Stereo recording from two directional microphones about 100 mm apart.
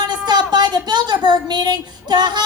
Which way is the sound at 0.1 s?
45° right (ahead or behind).